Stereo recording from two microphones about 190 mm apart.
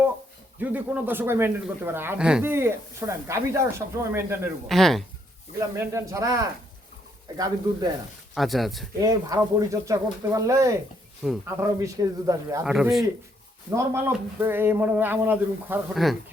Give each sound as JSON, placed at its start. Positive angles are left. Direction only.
{"t": 0.6, "sound": "speech", "side_deg": -10}
{"t": 4.7, "sound": "speech", "side_deg": 0}
{"t": 5.5, "sound": "speech", "side_deg": -15}
{"t": 8.4, "sound": "speech", "side_deg": 0}
{"t": 9.0, "sound": "speech", "side_deg": -15}
{"t": 11.2, "sound": "speech", "side_deg": 0}
{"t": 11.8, "sound": "speech", "side_deg": -15}
{"t": 12.6, "sound": "speech", "side_deg": 0}
{"t": 13.7, "sound": "speech", "side_deg": -10}